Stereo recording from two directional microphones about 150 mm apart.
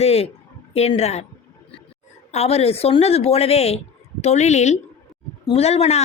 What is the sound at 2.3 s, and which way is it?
A woman's voice, 45° left (ahead or behind).